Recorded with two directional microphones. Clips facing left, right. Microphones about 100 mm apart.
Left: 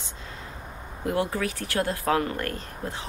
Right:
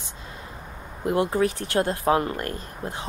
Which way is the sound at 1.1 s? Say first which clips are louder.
Right 4 dB; 25° right (ahead or behind).